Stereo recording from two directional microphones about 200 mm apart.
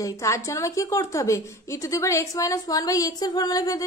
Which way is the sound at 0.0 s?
15° left (ahead or behind).